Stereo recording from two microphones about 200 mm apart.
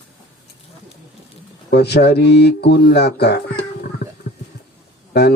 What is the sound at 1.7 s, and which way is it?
Speech, 55° left (ahead or behind).